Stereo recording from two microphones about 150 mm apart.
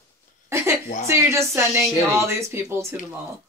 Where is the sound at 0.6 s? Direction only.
20° right (ahead or behind).